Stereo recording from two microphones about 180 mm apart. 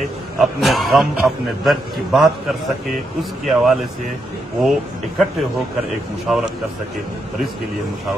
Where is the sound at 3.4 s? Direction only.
Centre (ahead or behind).